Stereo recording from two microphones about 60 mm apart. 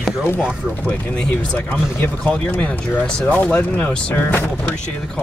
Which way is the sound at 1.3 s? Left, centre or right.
Left.